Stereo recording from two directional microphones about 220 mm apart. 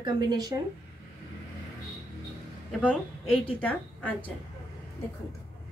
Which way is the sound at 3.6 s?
5° left (ahead or behind).